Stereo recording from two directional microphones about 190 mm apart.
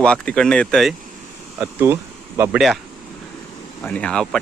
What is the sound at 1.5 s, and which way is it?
A man's voice, 10° right (ahead or behind).